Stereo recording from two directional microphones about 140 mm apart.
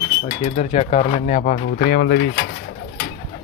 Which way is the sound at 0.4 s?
60° left (ahead or behind).